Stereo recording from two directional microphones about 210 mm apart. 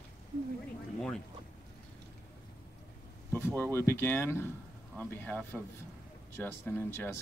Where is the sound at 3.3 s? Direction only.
10° left (ahead or behind).